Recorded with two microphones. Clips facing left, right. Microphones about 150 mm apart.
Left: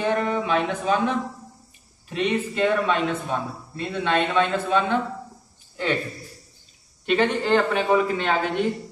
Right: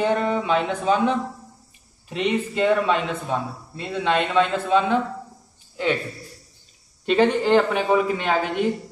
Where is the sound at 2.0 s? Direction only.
20° right (ahead or behind).